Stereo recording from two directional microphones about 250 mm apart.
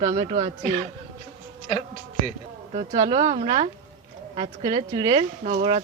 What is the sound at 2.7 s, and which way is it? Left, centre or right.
Speech, right.